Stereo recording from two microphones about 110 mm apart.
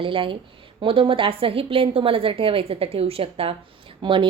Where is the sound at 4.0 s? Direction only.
45° right (ahead or behind).